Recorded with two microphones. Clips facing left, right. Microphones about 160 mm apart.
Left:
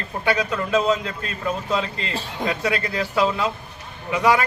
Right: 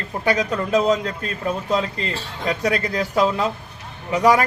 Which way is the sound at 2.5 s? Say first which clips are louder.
Right 3 dB; 40° right (ahead or behind).